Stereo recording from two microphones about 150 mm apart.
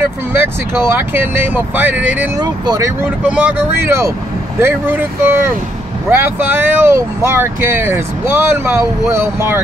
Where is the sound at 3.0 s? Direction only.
10° right (ahead or behind).